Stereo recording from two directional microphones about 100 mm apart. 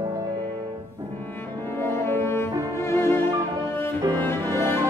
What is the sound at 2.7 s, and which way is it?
Music, 25° left (ahead or behind).